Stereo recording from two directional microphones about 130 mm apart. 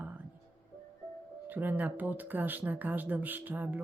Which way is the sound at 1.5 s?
15° right (ahead or behind).